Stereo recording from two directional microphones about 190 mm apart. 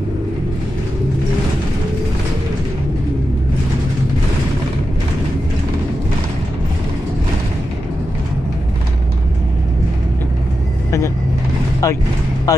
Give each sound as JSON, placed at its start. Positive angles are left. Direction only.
{"t": 11.8, "sound": "vehicle", "side_deg": 15}